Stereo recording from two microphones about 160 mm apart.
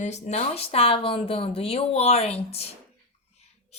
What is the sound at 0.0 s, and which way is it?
A woman's voice, 45° left (ahead or behind).